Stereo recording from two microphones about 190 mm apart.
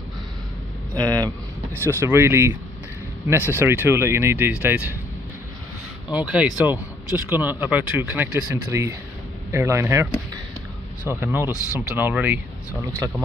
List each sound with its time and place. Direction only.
0.9 s speech: 20° right (ahead or behind)
6.1 s speech: 5° right (ahead or behind)
11.1 s speech: 15° right (ahead or behind)